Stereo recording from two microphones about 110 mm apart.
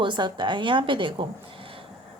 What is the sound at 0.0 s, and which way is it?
A woman's voice, 45° right (ahead or behind).